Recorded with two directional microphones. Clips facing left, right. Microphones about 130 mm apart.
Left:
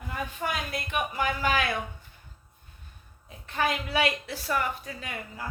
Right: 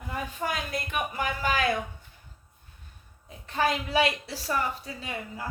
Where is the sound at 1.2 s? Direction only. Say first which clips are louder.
Left 2 dB; 40° right (ahead or behind).